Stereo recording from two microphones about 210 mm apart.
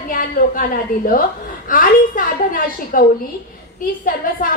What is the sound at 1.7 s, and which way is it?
A woman's voice, 40° left (ahead or behind).